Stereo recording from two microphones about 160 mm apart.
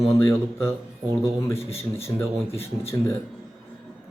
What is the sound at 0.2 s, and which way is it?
Speech, 15° left (ahead or behind).